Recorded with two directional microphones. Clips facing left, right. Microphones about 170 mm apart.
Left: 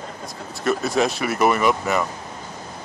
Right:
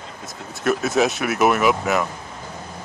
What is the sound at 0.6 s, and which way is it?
Speech, centre (ahead or behind).